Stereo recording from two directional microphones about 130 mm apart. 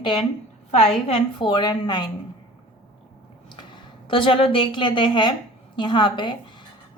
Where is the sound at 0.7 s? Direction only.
55° left (ahead or behind).